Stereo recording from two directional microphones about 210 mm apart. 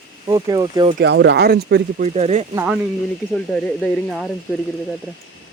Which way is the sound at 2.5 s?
10° right (ahead or behind).